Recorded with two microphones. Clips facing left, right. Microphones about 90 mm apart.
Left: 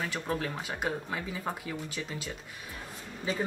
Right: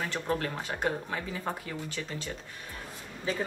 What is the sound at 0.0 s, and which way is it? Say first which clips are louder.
Speech: right 2 dB; 5° left (ahead or behind).